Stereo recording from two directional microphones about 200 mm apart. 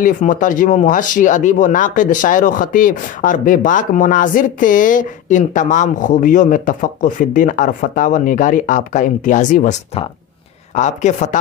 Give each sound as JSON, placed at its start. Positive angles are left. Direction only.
{"t": 0.0, "sound": "speech", "side_deg": 40}